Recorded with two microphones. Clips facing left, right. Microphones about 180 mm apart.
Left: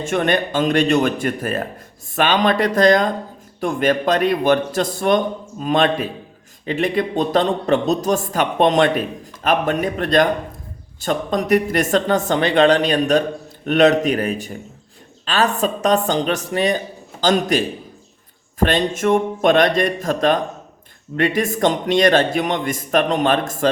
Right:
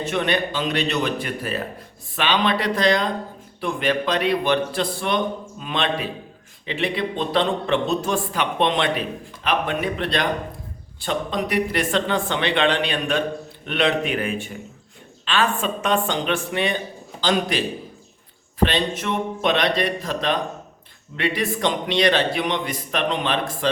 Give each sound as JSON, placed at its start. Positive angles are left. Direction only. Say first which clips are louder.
{"t": 0.0, "sound": "a man's voice", "louder": "left 4 dB", "side_deg": 45}
{"t": 18.6, "sound": "a man's voice", "louder": "left 4 dB", "side_deg": 45}